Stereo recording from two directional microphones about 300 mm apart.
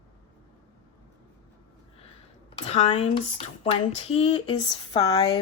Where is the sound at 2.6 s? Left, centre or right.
Centre.